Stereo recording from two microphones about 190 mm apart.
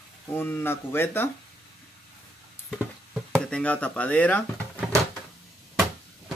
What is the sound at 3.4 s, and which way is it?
Speech, 5° left (ahead or behind).